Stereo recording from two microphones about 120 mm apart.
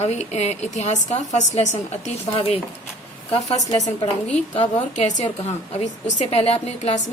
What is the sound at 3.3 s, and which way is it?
A woman's voice, 65° left (ahead or behind).